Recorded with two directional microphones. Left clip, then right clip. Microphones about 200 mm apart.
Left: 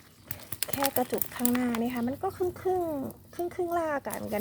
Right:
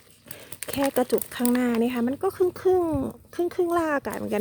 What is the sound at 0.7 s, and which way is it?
Speech, 45° right (ahead or behind).